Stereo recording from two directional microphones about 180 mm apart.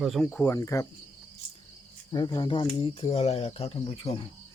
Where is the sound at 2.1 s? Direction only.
25° left (ahead or behind).